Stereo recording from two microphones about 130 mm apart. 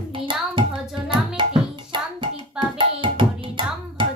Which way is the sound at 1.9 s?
40° right (ahead or behind).